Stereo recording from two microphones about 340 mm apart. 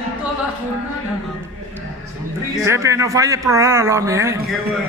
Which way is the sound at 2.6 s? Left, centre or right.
Centre.